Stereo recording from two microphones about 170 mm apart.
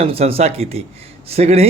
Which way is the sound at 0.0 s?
35° right (ahead or behind).